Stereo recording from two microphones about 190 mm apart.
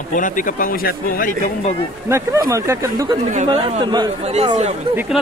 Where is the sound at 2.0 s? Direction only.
15° right (ahead or behind).